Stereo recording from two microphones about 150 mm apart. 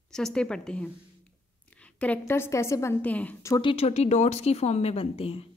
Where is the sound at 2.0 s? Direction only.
15° left (ahead or behind).